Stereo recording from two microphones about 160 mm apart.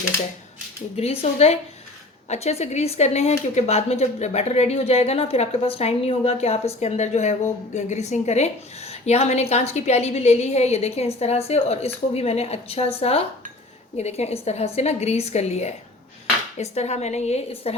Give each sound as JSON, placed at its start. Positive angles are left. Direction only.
{"t": 0.9, "sound": "a woman's voice", "side_deg": 40}